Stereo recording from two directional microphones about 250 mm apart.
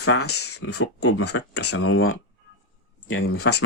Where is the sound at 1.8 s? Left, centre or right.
Left.